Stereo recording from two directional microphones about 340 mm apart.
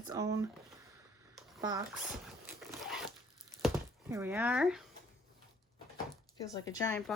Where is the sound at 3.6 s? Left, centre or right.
Centre.